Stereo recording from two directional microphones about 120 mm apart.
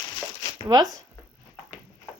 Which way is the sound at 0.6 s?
35° right (ahead or behind).